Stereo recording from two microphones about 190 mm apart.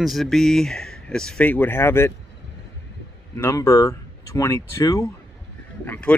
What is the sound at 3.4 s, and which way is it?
Speech, 15° left (ahead or behind).